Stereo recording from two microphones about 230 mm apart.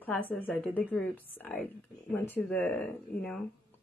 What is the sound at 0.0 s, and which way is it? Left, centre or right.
Speech, centre.